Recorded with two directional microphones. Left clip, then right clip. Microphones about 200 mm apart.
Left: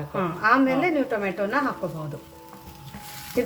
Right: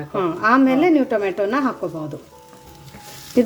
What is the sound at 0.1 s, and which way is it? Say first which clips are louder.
A woman's voice: right 4 dB; 35° right (ahead or behind).